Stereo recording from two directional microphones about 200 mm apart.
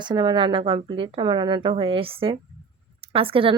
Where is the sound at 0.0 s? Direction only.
25° right (ahead or behind).